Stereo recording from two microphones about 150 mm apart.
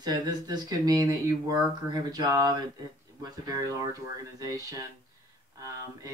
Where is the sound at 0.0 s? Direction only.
25° right (ahead or behind).